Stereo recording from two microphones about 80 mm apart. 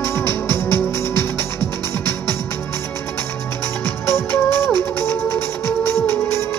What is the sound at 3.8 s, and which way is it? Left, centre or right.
Music, left.